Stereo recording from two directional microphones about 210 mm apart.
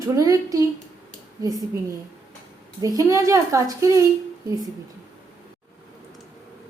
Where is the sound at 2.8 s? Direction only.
15° right (ahead or behind).